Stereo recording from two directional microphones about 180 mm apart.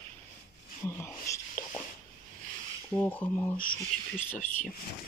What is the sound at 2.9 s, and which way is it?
Speech, 10° left (ahead or behind).